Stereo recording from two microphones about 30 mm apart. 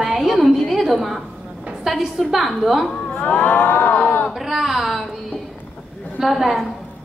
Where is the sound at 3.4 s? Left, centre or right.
Left.